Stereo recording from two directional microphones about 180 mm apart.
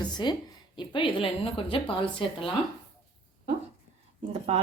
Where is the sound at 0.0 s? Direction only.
25° left (ahead or behind).